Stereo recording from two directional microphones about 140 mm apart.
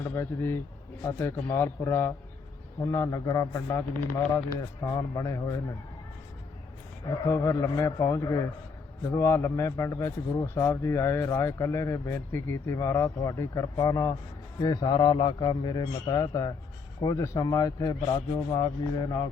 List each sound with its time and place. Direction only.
0.0 s a man's voice: 15° left (ahead or behind)
4.9 s a man's voice: 25° left (ahead or behind)
7.3 s a man's voice: 20° left (ahead or behind)